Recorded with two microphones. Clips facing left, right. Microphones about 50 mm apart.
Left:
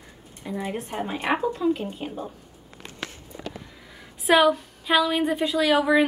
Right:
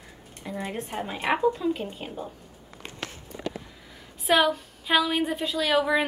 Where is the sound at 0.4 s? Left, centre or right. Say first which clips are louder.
Left 2 dB; centre.